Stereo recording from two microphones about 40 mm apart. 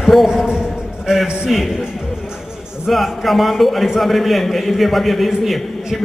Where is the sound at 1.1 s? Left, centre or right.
Centre.